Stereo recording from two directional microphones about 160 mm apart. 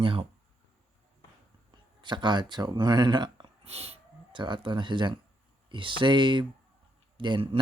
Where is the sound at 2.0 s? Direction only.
30° right (ahead or behind).